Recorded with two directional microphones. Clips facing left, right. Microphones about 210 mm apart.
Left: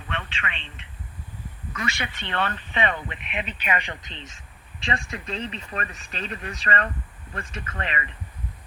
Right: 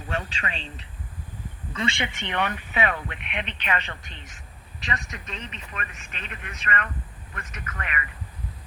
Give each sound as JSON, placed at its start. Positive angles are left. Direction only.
{"t": 0.1, "sound": "a man's voice", "side_deg": -40}
{"t": 1.7, "sound": "speech", "side_deg": -25}
{"t": 4.1, "sound": "speech", "side_deg": 25}